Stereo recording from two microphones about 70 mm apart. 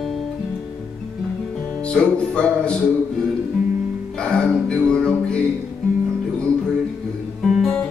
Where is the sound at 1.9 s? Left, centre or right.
Centre.